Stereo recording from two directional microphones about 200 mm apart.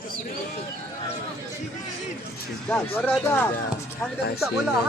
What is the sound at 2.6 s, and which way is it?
Speech, 5° left (ahead or behind).